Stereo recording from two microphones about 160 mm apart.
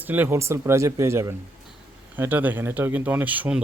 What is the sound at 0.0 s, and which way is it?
Speech, 10° right (ahead or behind).